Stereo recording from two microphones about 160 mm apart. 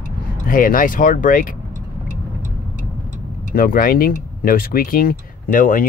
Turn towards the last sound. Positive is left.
turn(degrees=60)  # may be behind; listen again after turning